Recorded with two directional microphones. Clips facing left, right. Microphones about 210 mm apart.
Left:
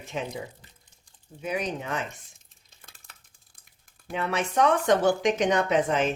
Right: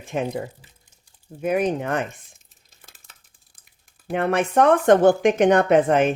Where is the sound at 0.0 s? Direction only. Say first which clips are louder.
Right 7 dB; 50° right (ahead or behind).